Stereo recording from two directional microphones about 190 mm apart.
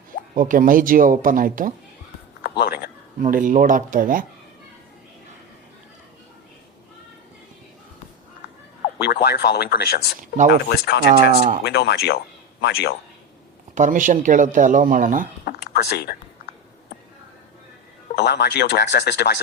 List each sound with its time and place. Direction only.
0.3 s speech: 45° right (ahead or behind)
2.4 s speech: 55° left (ahead or behind)
3.2 s speech: 45° right (ahead or behind)
9.2 s speech: 55° left (ahead or behind)
10.2 s speech: 40° right (ahead or behind)
10.7 s speech: 65° left (ahead or behind)
11.1 s speech: 40° right (ahead or behind)
11.6 s speech: 60° left (ahead or behind)
13.7 s speech: 40° right (ahead or behind)
15.4 s a sound: 55° left (ahead or behind)
18.2 s speech: 60° left (ahead or behind)